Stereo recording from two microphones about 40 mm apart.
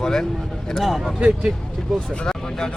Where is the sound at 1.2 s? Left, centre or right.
Right.